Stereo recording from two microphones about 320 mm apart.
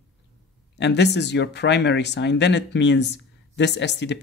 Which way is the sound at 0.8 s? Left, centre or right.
Left.